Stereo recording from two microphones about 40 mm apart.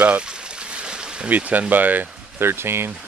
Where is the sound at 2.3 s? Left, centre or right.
Right.